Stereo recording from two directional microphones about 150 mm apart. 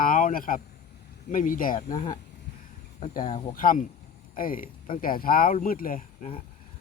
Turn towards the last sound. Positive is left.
turn(degrees=60)  # may be behind; listen again after turning